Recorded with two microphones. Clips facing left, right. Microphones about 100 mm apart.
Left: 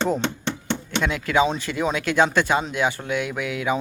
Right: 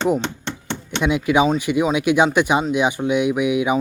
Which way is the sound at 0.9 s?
15° right (ahead or behind).